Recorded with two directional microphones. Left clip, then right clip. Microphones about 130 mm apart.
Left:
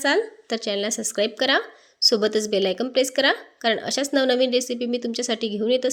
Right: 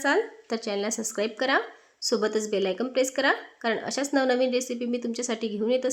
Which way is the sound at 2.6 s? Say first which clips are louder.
Left 4 dB; 15° left (ahead or behind).